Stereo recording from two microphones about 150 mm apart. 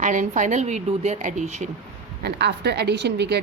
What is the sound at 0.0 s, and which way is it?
A woman's voice, 60° right (ahead or behind).